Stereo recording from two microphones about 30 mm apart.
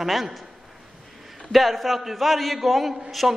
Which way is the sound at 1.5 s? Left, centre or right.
Centre.